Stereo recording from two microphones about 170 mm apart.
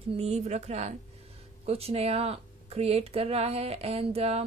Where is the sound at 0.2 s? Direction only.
40° right (ahead or behind).